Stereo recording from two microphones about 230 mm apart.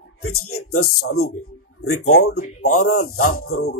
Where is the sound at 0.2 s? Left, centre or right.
Left.